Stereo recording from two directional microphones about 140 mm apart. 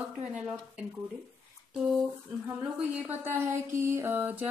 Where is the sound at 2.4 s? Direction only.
10° right (ahead or behind).